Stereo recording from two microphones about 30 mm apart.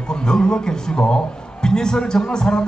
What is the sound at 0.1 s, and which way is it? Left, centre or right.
A man's voice, left.